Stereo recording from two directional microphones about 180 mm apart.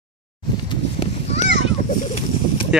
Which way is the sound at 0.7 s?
35° left (ahead or behind).